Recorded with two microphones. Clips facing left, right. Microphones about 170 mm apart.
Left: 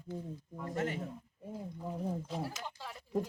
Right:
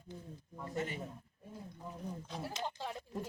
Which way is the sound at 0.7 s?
90° left.